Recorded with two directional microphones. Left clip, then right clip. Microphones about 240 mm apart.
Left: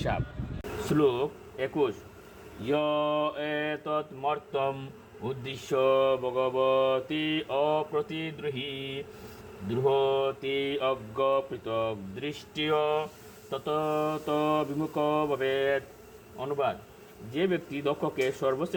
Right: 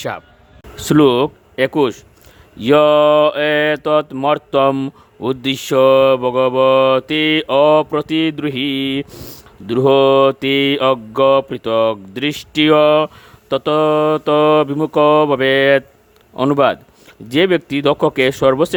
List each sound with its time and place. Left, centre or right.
0.9 s speech: right